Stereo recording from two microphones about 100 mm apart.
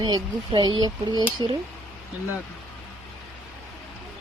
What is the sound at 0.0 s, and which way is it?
Speech, 50° right (ahead or behind).